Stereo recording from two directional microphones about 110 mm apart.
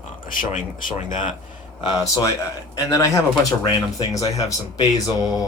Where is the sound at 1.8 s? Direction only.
35° left (ahead or behind).